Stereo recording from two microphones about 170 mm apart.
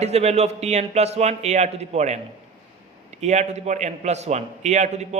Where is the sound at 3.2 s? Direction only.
40° right (ahead or behind).